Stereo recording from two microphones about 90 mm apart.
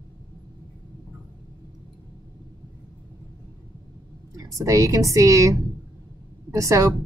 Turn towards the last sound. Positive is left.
turn(degrees=-35)  # may be behind; listen again after turning